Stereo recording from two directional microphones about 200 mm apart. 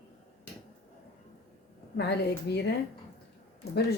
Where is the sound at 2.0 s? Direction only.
55° left (ahead or behind).